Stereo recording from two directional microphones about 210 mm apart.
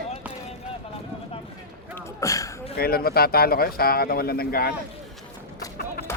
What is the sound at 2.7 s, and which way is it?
Speech, 45° left (ahead or behind).